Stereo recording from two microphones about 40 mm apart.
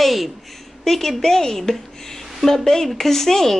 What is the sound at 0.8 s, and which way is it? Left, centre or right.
Speech, centre.